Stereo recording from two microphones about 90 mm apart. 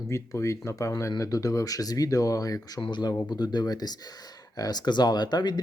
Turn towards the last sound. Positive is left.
turn(degrees=50)  # may be behind; listen again after turning